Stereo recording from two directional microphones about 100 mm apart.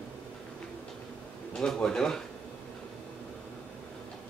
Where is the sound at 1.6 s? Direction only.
5° left (ahead or behind).